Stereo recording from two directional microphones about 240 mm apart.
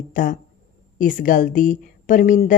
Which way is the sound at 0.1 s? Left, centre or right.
Left.